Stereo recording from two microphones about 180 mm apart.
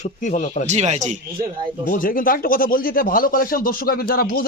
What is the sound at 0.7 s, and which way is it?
Speech, 40° right (ahead or behind).